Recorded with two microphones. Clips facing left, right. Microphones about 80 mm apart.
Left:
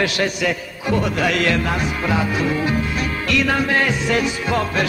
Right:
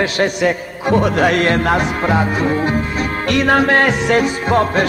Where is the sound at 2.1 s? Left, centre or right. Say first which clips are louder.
Right 3 dB; right.